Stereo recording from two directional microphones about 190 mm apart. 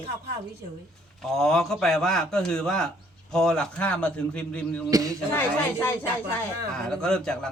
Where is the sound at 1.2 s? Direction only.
Centre (ahead or behind).